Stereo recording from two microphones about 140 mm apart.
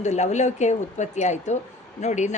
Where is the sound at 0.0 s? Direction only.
55° left (ahead or behind).